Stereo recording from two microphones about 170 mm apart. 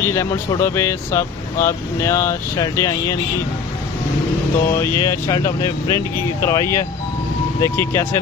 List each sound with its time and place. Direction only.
0.0 s speech: 15° left (ahead or behind)
4.9 s speech: 20° left (ahead or behind)